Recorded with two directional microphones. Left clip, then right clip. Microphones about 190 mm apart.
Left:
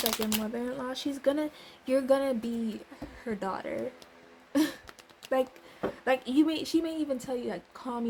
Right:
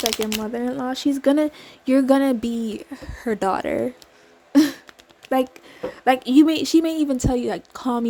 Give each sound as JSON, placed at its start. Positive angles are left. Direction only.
{"t": 0.1, "sound": "speech", "side_deg": -10}
{"t": 0.4, "sound": "speech", "side_deg": -45}
{"t": 4.5, "sound": "a sound", "side_deg": -45}
{"t": 6.1, "sound": "speech", "side_deg": -50}